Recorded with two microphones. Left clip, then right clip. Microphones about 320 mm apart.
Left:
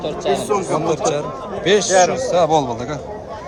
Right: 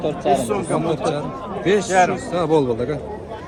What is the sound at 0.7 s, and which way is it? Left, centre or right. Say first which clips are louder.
A man's voice: left 2 dB; centre.